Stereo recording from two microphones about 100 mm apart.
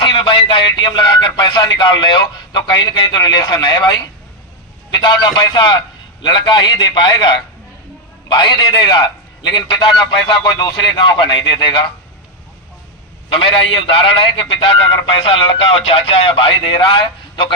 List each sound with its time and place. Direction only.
0.0 s a man's voice: 60° left (ahead or behind); by 4.0 s 40° left (ahead or behind)
5.0 s a man's voice: 50° left (ahead or behind)
13.9 s a man's voice: 65° left (ahead or behind)